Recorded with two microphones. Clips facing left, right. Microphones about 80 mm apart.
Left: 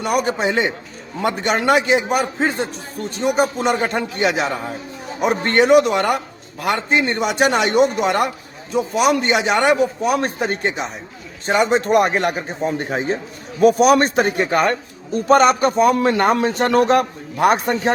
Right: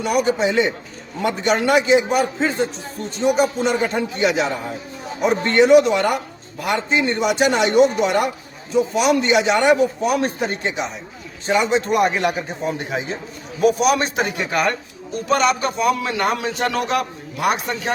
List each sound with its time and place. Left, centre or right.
0.0 s a man's voice: left